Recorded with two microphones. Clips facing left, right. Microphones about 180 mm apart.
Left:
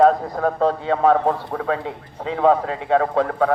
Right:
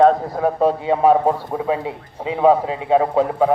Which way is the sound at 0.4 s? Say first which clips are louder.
Right 2 dB; 15° right (ahead or behind).